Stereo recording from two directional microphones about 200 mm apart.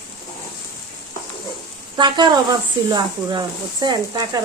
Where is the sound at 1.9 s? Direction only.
20° right (ahead or behind).